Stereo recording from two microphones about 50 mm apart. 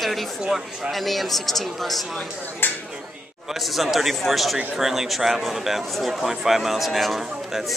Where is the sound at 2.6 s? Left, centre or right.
Left.